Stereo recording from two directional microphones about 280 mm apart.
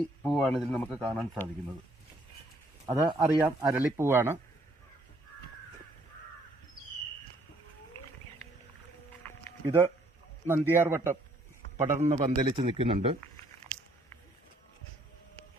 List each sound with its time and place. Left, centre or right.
0.2 s speech: centre
2.8 s speech: centre
9.6 s speech: centre
11.9 s a man's voice: right